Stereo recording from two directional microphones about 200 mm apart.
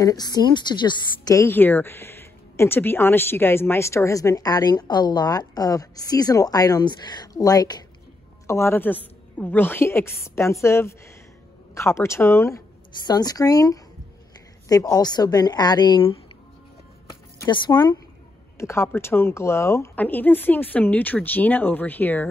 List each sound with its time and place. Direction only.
0.0 s a woman's voice: 20° left (ahead or behind)
17.4 s a woman's voice: 20° left (ahead or behind)